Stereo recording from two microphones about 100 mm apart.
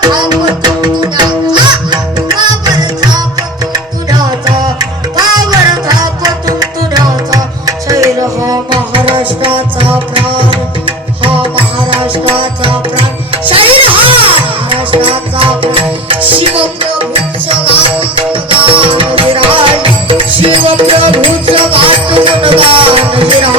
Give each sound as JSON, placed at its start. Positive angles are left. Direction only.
{"t": 0.0, "sound": "music", "side_deg": -45}
{"t": 4.4, "sound": "music", "side_deg": -40}
{"t": 6.9, "sound": "music", "side_deg": -40}
{"t": 8.7, "sound": "music", "side_deg": -60}
{"t": 18.4, "sound": "music", "side_deg": -60}